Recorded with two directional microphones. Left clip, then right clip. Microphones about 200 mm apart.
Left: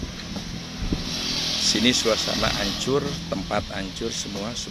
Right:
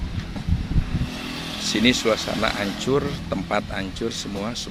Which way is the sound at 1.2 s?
20° right (ahead or behind).